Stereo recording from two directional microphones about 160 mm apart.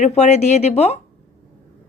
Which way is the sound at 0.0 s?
45° left (ahead or behind).